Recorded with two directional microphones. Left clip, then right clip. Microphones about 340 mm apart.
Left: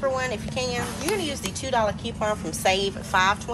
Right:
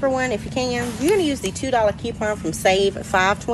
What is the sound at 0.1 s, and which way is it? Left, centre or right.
Speech, centre.